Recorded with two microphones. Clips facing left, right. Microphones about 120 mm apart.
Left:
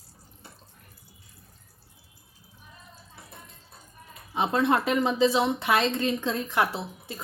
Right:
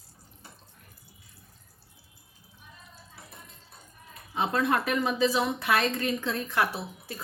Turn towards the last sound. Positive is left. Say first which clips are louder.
# left 2 dB
turn(degrees=20)  # may be behind; listen again after turning